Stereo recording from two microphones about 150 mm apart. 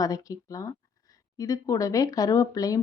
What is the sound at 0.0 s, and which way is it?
Speech, 25° left (ahead or behind).